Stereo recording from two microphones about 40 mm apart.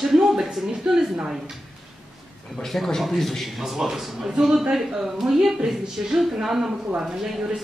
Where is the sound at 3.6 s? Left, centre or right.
Centre.